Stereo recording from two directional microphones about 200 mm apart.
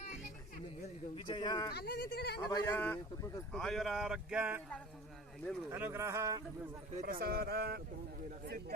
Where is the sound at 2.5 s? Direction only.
10° left (ahead or behind).